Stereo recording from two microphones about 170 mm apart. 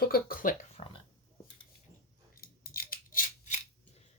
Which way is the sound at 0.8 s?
35° left (ahead or behind).